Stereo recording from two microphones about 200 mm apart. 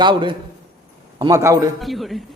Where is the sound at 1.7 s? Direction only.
Centre (ahead or behind).